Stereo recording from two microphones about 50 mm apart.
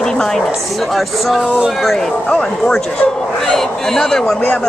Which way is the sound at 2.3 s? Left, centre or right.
Centre.